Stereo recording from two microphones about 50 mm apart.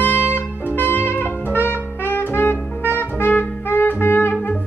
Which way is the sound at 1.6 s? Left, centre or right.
Left.